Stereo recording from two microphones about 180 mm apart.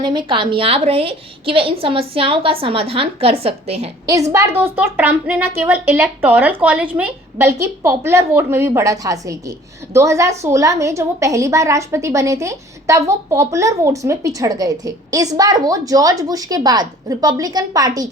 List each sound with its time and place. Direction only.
0.0 s a woman's voice: 25° right (ahead or behind)
4.0 s a woman's voice: 20° right (ahead or behind)